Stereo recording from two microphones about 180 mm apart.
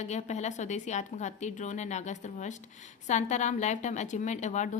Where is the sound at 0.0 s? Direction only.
40° left (ahead or behind).